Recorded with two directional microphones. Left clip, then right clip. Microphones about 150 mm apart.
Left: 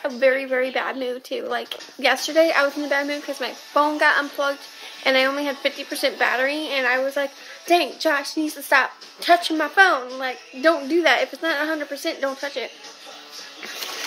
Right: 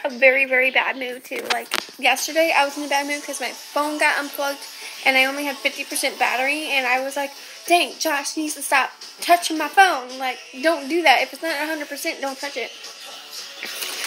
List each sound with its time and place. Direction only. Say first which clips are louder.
0.3 s a woman's voice: right 4 dB; 5° left (ahead or behind)
1.6 s a woman's voice: right 2 dB; 30° left (ahead or behind)